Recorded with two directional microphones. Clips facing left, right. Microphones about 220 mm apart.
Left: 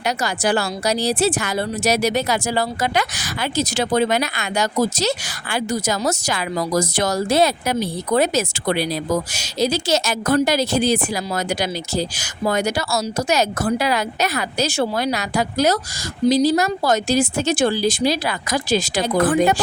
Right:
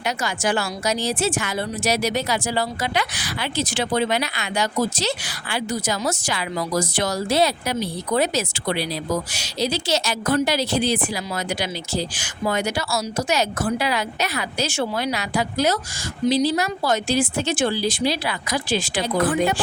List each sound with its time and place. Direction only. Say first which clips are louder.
0.0 s a woman's voice: left 3 dB; 40° left (ahead or behind)